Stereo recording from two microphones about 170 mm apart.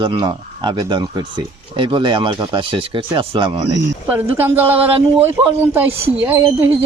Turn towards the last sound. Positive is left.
turn(degrees=-10)  # may be behind; listen again after turning